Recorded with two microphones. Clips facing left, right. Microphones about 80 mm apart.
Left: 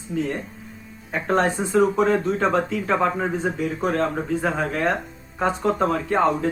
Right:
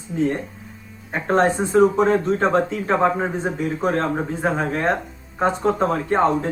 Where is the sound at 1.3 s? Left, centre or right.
Right.